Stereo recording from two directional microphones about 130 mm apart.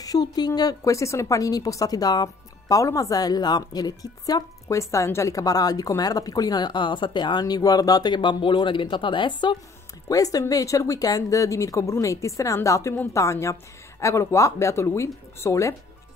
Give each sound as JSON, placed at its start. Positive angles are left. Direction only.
{"t": 0.0, "sound": "a woman's voice", "side_deg": 30}
{"t": 10.0, "sound": "a woman's voice", "side_deg": 25}